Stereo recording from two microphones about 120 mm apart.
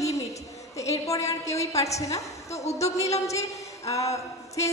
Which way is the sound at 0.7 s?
25° left (ahead or behind).